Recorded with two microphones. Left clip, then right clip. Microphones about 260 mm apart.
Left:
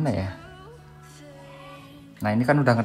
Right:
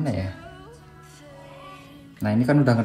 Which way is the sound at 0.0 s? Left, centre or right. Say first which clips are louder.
Left 1 dB; left.